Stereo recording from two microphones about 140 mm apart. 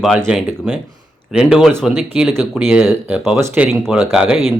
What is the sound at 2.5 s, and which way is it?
Speech, 15° right (ahead or behind).